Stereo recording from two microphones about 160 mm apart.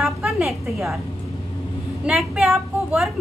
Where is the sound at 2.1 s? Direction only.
Centre (ahead or behind).